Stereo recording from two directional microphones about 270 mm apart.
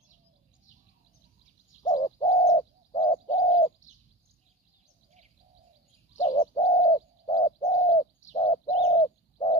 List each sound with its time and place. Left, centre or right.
1.8 s bird: centre
6.1 s bird: centre